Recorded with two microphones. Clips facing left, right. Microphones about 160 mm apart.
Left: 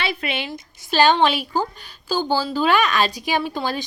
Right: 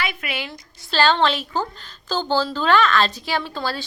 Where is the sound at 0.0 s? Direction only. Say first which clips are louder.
Left 2 dB; 30° left (ahead or behind).